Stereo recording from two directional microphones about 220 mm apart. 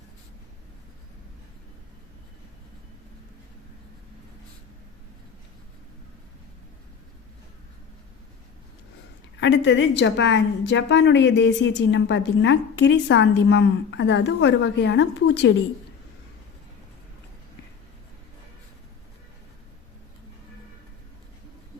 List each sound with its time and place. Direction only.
9.4 s a woman's voice: 55° left (ahead or behind)